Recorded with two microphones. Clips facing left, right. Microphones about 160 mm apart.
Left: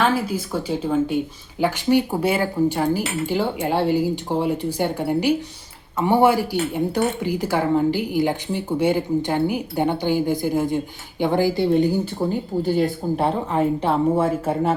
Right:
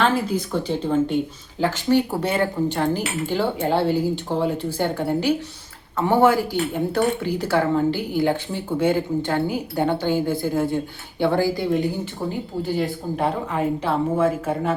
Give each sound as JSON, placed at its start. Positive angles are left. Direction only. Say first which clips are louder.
{"t": 0.0, "sound": "speech", "louder": "even", "side_deg": 5}